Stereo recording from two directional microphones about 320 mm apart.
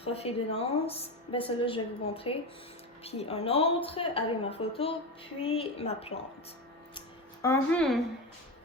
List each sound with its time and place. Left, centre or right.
0.0 s a woman's voice: centre
7.4 s a woman's voice: centre